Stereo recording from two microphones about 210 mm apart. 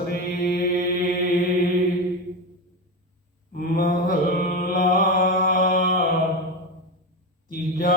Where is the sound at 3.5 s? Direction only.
40° left (ahead or behind).